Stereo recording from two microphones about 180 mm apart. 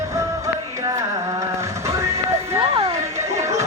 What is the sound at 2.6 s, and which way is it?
Music, 30° right (ahead or behind).